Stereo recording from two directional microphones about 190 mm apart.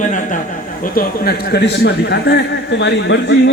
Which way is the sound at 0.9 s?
50° left (ahead or behind).